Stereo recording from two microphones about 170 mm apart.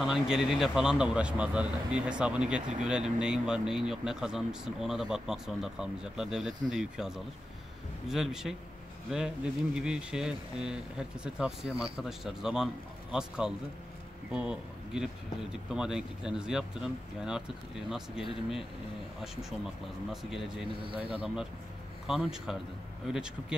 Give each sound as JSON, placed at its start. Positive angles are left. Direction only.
{"t": 0.0, "sound": "speech", "side_deg": 0}
{"t": 20.1, "sound": "speech", "side_deg": 0}
{"t": 20.8, "sound": "a man's voice", "side_deg": -30}
{"t": 21.1, "sound": "speech", "side_deg": -5}